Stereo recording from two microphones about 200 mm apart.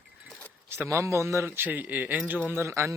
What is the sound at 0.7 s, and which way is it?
Speech, 10° right (ahead or behind).